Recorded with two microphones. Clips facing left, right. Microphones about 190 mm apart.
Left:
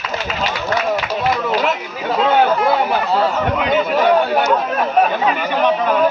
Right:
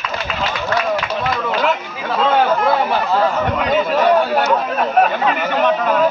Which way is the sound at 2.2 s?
Centre (ahead or behind).